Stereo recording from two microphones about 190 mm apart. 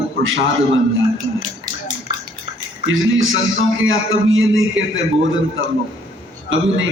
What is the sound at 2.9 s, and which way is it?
A man's voice, 90° right.